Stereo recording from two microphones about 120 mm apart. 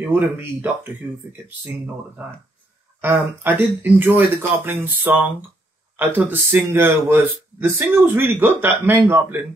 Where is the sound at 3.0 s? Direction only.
15° right (ahead or behind).